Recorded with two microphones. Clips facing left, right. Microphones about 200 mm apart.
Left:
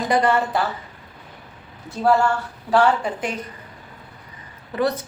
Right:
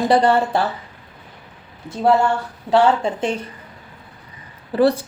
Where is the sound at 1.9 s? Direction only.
20° right (ahead or behind).